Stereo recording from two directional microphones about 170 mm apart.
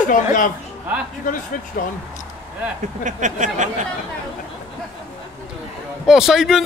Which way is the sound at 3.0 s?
45° right (ahead or behind).